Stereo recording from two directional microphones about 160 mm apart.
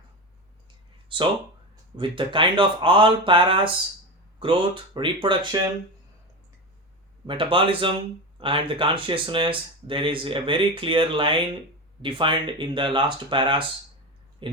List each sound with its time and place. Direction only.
1.0 s a sound: 30° right (ahead or behind)
1.7 s speech: 30° right (ahead or behind)
7.3 s speech: 30° right (ahead or behind)